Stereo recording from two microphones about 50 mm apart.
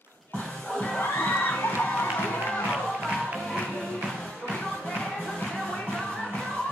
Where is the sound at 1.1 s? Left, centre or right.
Left.